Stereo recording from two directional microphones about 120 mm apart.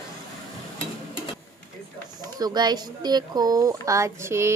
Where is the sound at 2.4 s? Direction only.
35° right (ahead or behind).